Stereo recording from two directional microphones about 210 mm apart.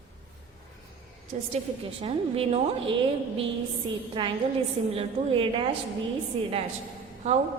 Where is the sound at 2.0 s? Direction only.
30° right (ahead or behind).